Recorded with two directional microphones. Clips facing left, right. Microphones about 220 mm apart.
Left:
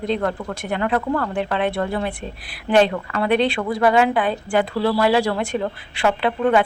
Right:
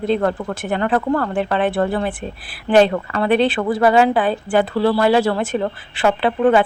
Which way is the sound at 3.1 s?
35° right (ahead or behind).